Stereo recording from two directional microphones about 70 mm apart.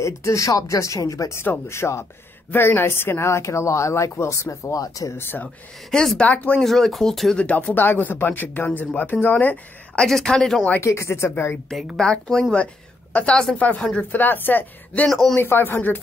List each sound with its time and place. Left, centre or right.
0.0 s speech: left
1.4 s speech: left
5.1 s speech: left
5.9 s speech: centre
6.6 s speech: centre
7.3 s speech: centre
9.9 s speech: centre
10.8 s speech: left
12.0 s speech: centre
13.6 s speech: left
15.0 s speech: centre
15.3 s speech: left